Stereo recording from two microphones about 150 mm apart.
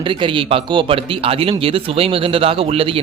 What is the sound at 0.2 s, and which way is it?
Speech, 35° right (ahead or behind).